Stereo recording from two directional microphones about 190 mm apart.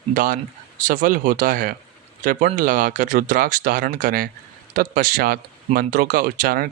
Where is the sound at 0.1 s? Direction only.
45° right (ahead or behind).